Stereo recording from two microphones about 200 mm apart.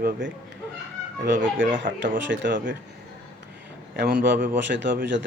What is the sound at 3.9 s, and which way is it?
A man's voice, 55° right (ahead or behind).